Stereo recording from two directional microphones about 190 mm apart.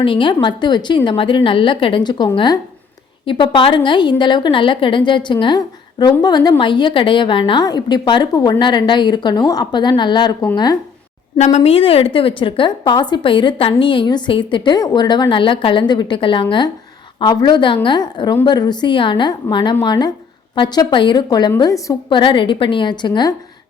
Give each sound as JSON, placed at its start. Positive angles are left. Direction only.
{"t": 0.0, "sound": "a woman's voice", "side_deg": 25}
{"t": 11.3, "sound": "a woman's voice", "side_deg": 35}